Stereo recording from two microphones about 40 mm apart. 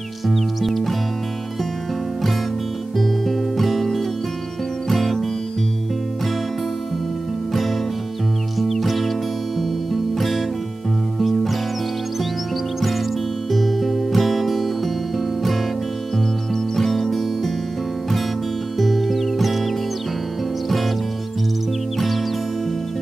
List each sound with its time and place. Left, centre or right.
0.3 s music: centre
3.0 s music: centre
7.5 s music: centre
10.1 s music: centre
13.5 s music: centre
16.7 s music: centre
18.8 s music: centre
21.9 s music: centre